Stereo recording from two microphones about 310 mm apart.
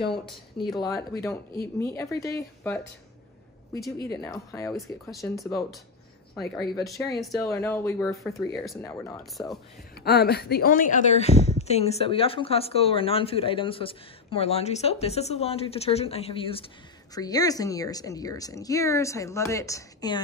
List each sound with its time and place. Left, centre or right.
0.7 s a woman's voice: centre
4.0 s a woman's voice: centre
6.8 s a woman's voice: centre
10.0 s a woman's voice: left; by 20.2 s centre